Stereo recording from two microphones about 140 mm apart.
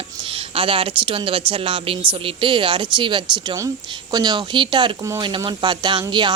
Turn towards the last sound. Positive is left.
turn(degrees=-35)  # may be behind; listen again after turning